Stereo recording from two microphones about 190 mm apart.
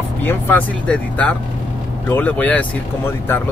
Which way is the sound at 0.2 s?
10° left (ahead or behind).